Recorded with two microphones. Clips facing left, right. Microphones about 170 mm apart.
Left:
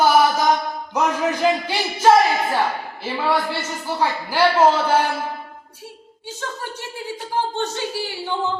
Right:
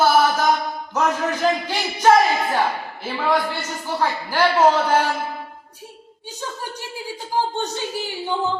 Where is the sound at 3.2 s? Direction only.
10° left (ahead or behind).